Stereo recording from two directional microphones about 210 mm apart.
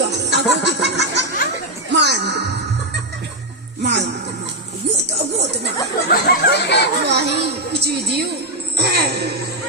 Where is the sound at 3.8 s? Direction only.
55° right (ahead or behind).